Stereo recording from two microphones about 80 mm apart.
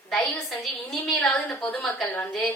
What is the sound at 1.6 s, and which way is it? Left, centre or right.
Speech, left.